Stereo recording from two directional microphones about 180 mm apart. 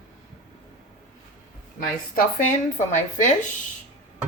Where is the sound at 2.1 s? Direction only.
45° left (ahead or behind).